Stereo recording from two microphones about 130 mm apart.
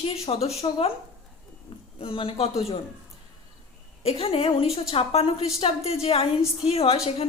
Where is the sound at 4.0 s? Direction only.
50° left (ahead or behind).